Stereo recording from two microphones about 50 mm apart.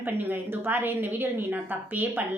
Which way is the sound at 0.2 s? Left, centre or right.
Right.